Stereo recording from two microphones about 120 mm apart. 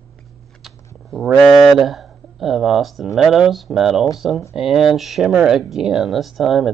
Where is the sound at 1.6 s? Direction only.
Centre (ahead or behind).